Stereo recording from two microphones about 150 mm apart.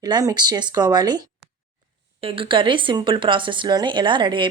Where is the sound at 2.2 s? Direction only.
35° right (ahead or behind).